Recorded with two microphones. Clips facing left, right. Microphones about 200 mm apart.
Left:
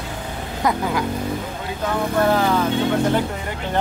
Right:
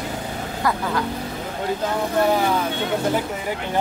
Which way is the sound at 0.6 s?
20° left (ahead or behind).